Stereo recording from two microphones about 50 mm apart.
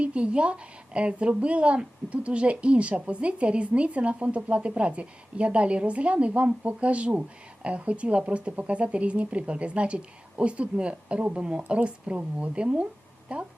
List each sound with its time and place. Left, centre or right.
0.0 s a woman's voice: right